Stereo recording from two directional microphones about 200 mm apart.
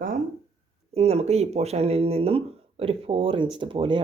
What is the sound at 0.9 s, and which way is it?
Speech, 30° right (ahead or behind).